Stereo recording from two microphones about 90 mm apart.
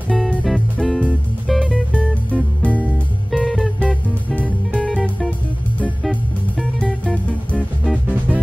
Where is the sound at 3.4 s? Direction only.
Centre (ahead or behind).